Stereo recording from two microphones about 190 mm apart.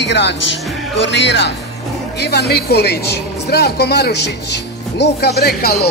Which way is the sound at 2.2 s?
60° left (ahead or behind).